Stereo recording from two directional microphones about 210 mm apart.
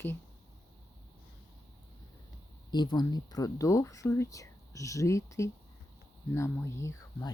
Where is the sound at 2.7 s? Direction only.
20° left (ahead or behind).